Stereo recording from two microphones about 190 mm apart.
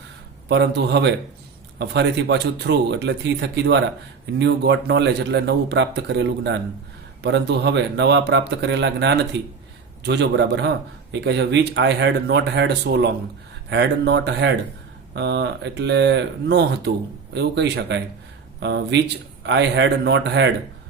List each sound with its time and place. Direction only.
0.4 s a man's voice: 65° right (ahead or behind)